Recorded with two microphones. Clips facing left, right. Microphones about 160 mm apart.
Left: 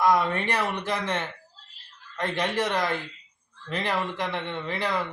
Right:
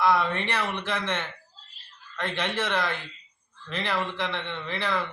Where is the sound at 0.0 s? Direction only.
40° left (ahead or behind).